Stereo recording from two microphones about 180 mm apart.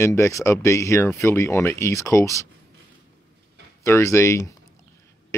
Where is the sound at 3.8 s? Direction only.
15° left (ahead or behind).